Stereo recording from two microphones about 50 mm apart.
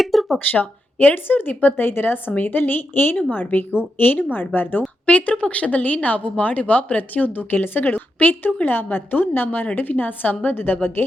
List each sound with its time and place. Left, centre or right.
0.0 s a sound: centre
0.3 s a woman's voice: left
5.0 s a woman's voice: left